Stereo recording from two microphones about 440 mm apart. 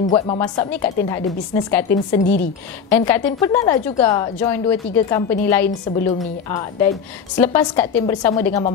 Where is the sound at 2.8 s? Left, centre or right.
Centre.